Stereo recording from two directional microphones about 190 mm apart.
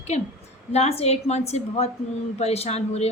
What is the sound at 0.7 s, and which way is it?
A woman's voice, 35° left (ahead or behind).